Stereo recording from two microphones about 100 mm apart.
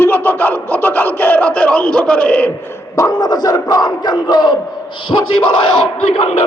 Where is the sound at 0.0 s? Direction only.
20° left (ahead or behind).